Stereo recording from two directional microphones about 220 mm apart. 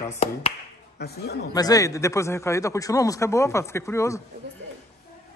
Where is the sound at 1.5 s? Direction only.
15° left (ahead or behind).